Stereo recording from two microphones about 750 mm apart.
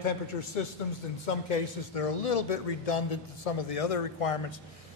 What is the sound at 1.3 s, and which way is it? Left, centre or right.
Speech, left.